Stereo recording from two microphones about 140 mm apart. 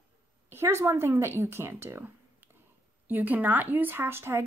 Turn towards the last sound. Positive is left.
turn(degrees=-15)  # may be behind; listen again after turning